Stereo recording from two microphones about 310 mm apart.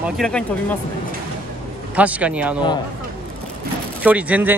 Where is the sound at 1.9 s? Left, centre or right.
Centre.